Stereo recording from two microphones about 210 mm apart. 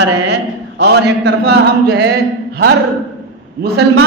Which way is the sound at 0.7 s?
55° right (ahead or behind).